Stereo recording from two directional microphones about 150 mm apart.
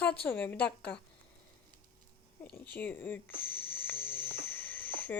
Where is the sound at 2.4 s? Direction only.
10° left (ahead or behind).